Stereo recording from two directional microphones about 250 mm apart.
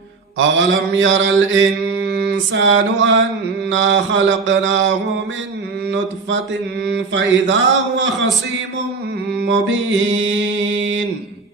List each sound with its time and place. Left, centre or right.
0.3 s mantra: right
6.8 s mantra: right
9.4 s mantra: right